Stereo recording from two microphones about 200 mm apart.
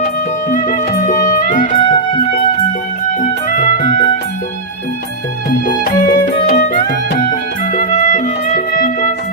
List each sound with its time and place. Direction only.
0.5 s music: 40° left (ahead or behind)
3.2 s music: 40° left (ahead or behind)
5.5 s music: 45° left (ahead or behind)